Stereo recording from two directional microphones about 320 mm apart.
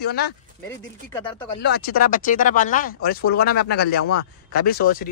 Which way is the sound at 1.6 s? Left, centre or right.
Left.